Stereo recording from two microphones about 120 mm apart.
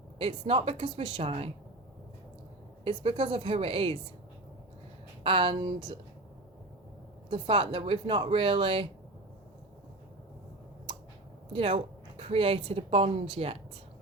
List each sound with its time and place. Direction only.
0.2 s speech: 50° right (ahead or behind)
2.8 s speech: 50° right (ahead or behind)
5.2 s speech: 45° right (ahead or behind)
7.3 s speech: 45° right (ahead or behind)
11.5 s speech: 50° right (ahead or behind)